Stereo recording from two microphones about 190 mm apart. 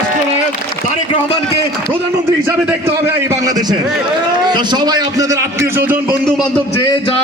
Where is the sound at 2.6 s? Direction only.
15° right (ahead or behind).